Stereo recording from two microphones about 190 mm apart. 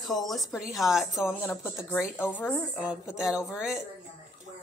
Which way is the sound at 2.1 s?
10° left (ahead or behind).